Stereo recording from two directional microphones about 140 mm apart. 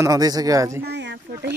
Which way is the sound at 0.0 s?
25° right (ahead or behind).